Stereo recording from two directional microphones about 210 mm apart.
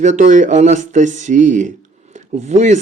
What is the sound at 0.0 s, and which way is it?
Speech, 35° right (ahead or behind).